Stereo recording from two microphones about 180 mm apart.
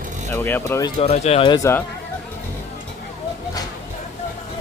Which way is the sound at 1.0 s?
35° left (ahead or behind).